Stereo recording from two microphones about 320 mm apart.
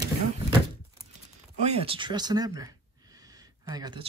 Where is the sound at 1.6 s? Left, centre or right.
Centre.